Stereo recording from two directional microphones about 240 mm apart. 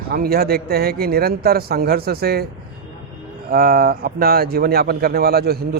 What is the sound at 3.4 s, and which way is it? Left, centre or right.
Speech, right.